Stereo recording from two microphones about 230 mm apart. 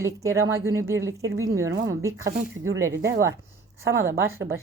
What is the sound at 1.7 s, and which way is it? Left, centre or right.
Speech, right.